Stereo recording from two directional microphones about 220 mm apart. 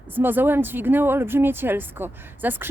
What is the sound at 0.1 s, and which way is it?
Speech, 10° right (ahead or behind).